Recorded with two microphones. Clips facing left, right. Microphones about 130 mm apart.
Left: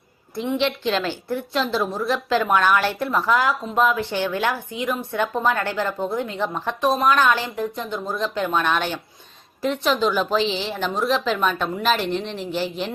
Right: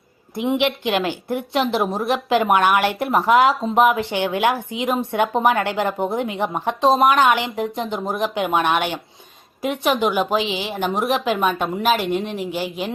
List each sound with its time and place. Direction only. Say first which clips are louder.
0.3 s speech: right 3 dB; 20° right (ahead or behind)
10.1 s speech: right 1 dB; 10° right (ahead or behind)